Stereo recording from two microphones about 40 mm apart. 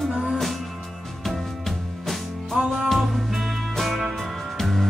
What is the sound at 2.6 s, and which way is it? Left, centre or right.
Music, centre.